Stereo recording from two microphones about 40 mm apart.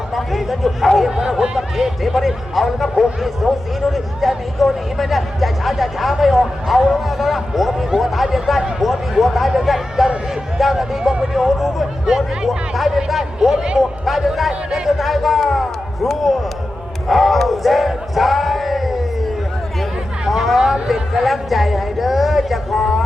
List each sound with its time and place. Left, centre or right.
0.1 s a man's voice: centre
11.1 s a man's voice: centre
11.4 s a man's voice: centre
17.1 s a sound: centre
20.2 s speech: centre